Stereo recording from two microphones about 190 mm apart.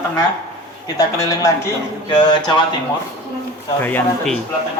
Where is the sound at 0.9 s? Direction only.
15° left (ahead or behind).